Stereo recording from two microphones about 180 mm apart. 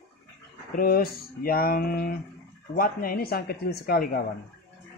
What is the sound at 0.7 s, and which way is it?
Speech, 55° left (ahead or behind).